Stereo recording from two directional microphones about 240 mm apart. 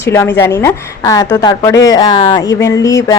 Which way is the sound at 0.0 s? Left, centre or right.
Centre.